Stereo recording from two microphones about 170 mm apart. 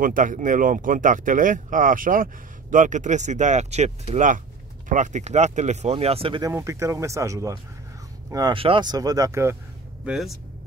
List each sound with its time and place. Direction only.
0.0 s speech: 50° right (ahead or behind); by 6.5 s 30° right (ahead or behind)
6.5 s speech: 15° right (ahead or behind)
10.0 s speech: centre (ahead or behind)